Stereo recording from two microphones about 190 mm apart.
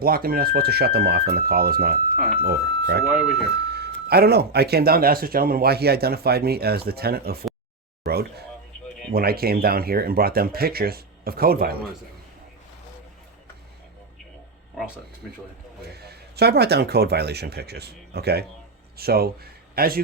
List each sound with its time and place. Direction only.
0.0 s speech: 50° right (ahead or behind)
8.0 s a sound: 55° right (ahead or behind)
9.1 s speech: 55° right (ahead or behind)
16.0 s speech: 60° right (ahead or behind)